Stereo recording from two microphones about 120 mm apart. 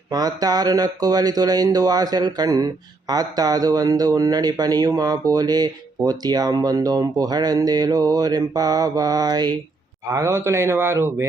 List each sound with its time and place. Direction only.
0.1 s speech: 35° right (ahead or behind)